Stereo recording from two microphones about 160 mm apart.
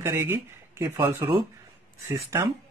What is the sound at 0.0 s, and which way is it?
Speech, 15° right (ahead or behind).